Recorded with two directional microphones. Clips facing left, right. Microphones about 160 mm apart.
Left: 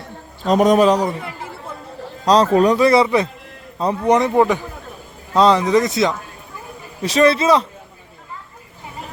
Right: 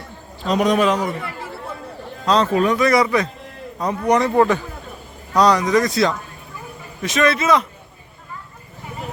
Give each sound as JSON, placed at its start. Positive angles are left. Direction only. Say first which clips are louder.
{"t": 0.4, "sound": "speech", "louder": "left 4 dB", "side_deg": 45}
{"t": 2.2, "sound": "speech", "louder": "left 4 dB", "side_deg": 35}
{"t": 7.0, "sound": "speech", "louder": "left 4 dB", "side_deg": 30}